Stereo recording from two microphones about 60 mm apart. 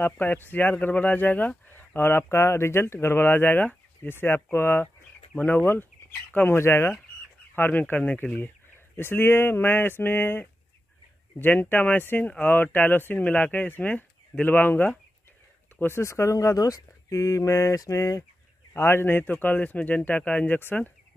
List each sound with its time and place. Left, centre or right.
0.0 s speech: left
7.5 s a man's voice: left
16.0 s speech: left
18.7 s a man's voice: left